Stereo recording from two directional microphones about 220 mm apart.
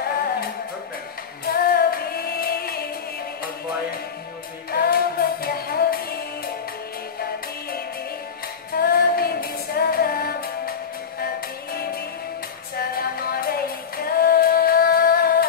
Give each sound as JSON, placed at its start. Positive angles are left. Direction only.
{"t": 1.4, "sound": "music", "side_deg": 45}
{"t": 4.6, "sound": "music", "side_deg": 45}
{"t": 8.7, "sound": "music", "side_deg": 45}
{"t": 11.7, "sound": "music", "side_deg": 45}